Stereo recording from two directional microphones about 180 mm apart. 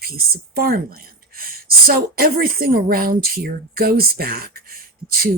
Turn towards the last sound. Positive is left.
turn(degrees=-55)  # may be behind; listen again after turning